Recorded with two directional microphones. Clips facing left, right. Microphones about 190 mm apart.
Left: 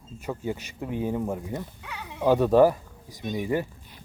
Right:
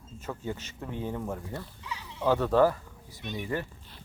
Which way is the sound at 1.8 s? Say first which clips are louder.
Left 2 dB; 60° left (ahead or behind).